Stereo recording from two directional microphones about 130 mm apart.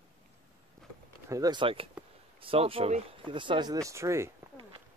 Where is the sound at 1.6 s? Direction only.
45° right (ahead or behind).